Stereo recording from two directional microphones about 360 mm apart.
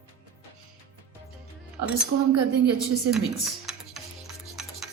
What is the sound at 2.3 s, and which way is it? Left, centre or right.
Speech, right.